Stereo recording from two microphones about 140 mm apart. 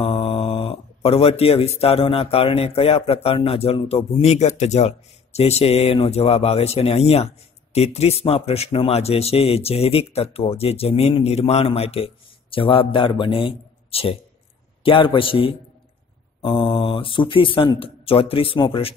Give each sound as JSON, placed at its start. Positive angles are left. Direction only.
{"t": 0.0, "sound": "speech", "side_deg": 45}